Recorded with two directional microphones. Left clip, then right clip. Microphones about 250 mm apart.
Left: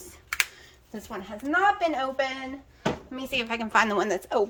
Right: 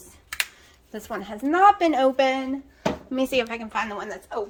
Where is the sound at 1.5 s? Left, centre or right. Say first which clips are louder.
Right 6 dB; right.